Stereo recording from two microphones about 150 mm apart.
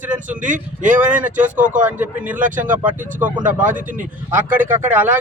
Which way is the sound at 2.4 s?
60° right (ahead or behind).